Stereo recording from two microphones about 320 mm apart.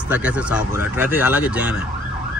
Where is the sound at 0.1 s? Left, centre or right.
Centre.